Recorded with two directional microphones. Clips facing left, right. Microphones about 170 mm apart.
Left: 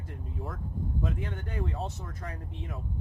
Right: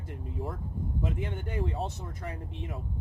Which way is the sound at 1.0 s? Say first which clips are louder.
Right 2 dB; 20° right (ahead or behind).